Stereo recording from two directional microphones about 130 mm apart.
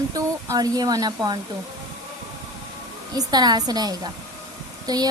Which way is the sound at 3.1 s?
30° right (ahead or behind).